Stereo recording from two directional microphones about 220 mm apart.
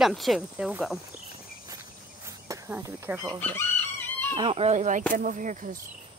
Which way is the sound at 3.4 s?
10° left (ahead or behind).